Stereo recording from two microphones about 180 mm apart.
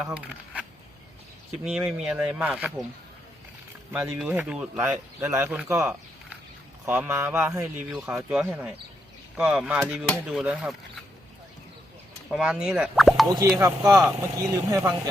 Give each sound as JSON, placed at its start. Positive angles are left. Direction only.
{"t": 0.0, "sound": "speech", "side_deg": -5}
{"t": 3.9, "sound": "speech", "side_deg": -10}
{"t": 5.8, "sound": "a sound", "side_deg": -5}
{"t": 6.8, "sound": "speech", "side_deg": -10}
{"t": 12.3, "sound": "speech", "side_deg": -5}
{"t": 13.3, "sound": "speech", "side_deg": -20}